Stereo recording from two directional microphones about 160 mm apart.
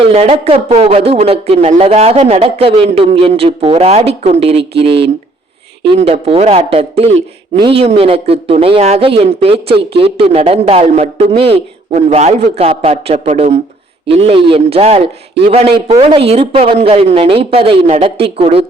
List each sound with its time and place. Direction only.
0.1 s speech: 40° right (ahead or behind)